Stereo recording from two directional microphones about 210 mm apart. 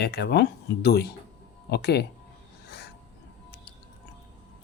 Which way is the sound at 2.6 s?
50° left (ahead or behind).